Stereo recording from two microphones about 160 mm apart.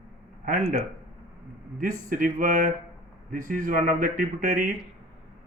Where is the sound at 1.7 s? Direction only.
60° right (ahead or behind).